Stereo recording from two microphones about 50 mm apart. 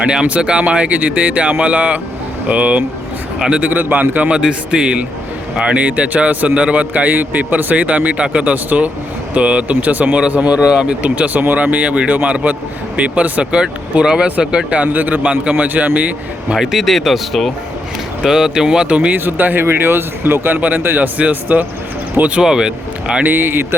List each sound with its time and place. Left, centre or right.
0.0 s a man's voice: centre
3.3 s a man's voice: centre
3.6 s a man's voice: right
4.3 s a man's voice: centre
10.7 s speech: centre
11.0 s a man's voice: right
14.7 s a man's voice: right
16.6 s speech: centre
18.2 s speech: centre
18.9 s a man's voice: right
19.1 s a man's voice: right
20.6 s a man's voice: right
22.4 s speech: centre
23.2 s speech: right